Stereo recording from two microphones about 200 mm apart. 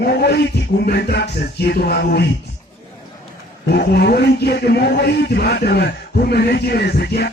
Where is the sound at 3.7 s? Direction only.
55° left (ahead or behind).